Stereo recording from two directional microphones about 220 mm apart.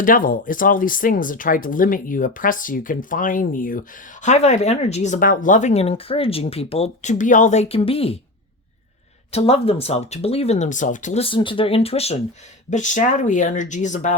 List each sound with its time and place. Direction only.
0.0 s speech: 40° left (ahead or behind)
9.3 s speech: 25° left (ahead or behind)